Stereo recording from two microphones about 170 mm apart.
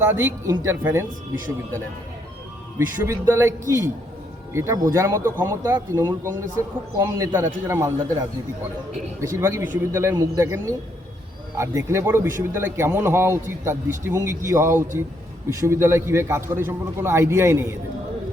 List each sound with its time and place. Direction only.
0.1 s a man's voice: 15° right (ahead or behind)
2.7 s a man's voice: 15° right (ahead or behind)
9.2 s a man's voice: 15° right (ahead or behind)